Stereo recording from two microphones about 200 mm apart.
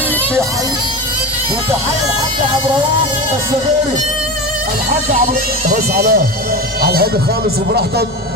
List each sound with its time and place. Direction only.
5.1 s speech: 45° right (ahead or behind)